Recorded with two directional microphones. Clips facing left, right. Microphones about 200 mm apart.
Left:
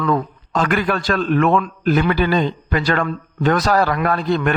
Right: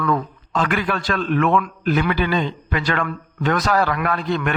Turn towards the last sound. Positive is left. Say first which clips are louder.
# left 4 dB
turn(degrees=35)  # may be behind; listen again after turning